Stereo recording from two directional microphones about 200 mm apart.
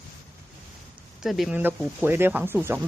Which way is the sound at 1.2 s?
Centre (ahead or behind).